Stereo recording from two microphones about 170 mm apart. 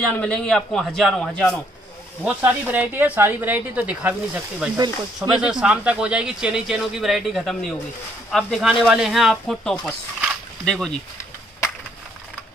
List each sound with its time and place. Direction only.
0.1 s speech: 5° left (ahead or behind)
2.2 s speech: 10° right (ahead or behind)
4.7 s speech: 25° right (ahead or behind)
5.3 s speech: 5° right (ahead or behind)